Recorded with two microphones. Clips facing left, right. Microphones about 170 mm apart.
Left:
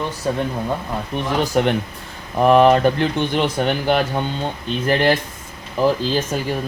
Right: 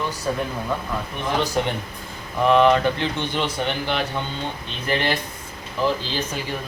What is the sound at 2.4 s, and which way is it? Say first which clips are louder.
Speech: left 4 dB; 40° left (ahead or behind).